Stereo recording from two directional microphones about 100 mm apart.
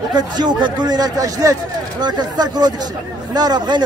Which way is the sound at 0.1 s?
45° right (ahead or behind).